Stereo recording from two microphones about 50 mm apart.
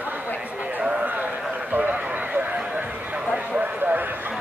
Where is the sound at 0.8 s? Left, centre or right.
Right.